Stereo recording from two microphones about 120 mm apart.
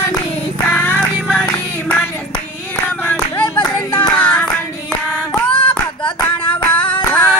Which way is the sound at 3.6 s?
40° left (ahead or behind).